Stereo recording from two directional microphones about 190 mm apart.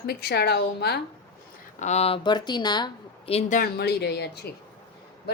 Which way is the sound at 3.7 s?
60° left (ahead or behind).